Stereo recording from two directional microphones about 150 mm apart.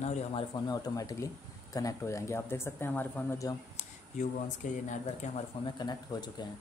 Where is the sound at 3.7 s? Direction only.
55° left (ahead or behind).